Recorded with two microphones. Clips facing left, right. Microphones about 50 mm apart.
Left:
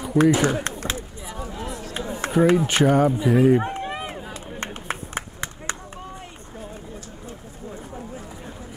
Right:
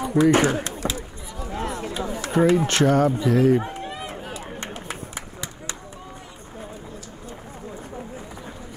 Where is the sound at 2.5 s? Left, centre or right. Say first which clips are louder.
Left 1 dB; centre.